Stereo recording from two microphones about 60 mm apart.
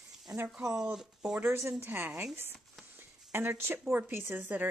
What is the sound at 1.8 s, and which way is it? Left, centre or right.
Speech, right.